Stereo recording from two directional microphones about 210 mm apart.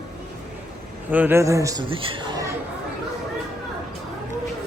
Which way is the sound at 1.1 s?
10° right (ahead or behind).